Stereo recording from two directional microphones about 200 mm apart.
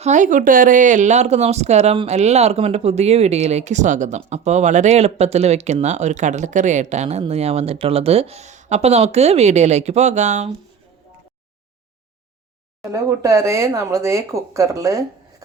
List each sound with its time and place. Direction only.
0.0 s speech: 40° right (ahead or behind)
12.9 s speech: 15° right (ahead or behind)